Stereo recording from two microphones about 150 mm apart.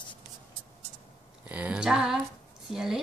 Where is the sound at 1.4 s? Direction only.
10° right (ahead or behind).